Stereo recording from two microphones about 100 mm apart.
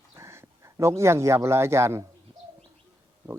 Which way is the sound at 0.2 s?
30° right (ahead or behind).